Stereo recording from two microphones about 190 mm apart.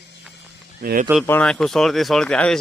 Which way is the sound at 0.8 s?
50° right (ahead or behind).